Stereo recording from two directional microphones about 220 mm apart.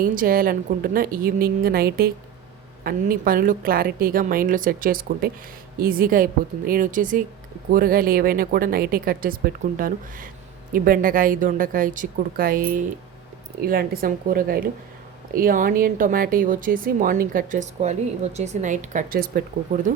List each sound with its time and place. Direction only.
0.0 s a woman's voice: 40° right (ahead or behind)